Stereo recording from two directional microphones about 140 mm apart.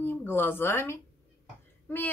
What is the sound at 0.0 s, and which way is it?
A woman's voice, 15° left (ahead or behind).